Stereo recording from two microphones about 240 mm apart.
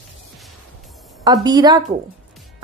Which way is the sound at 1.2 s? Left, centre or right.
Centre.